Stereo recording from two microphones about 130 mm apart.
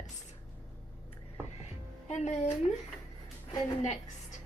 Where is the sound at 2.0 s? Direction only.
65° left (ahead or behind).